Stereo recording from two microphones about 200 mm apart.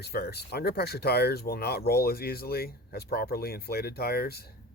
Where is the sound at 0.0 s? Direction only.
55° left (ahead or behind).